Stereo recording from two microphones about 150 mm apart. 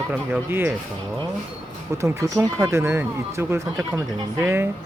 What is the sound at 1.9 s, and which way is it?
Speech, 20° right (ahead or behind).